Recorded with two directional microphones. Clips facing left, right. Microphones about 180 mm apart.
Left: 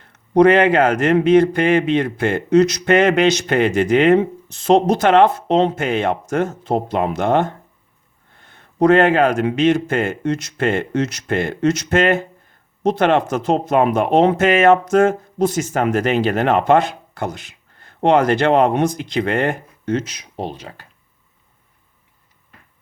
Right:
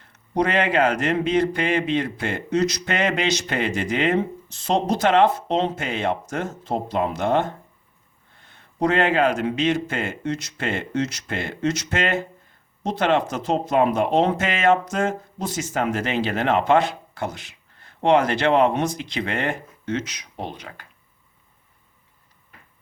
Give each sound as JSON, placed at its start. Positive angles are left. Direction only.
{"t": 0.3, "sound": "speech", "side_deg": 50}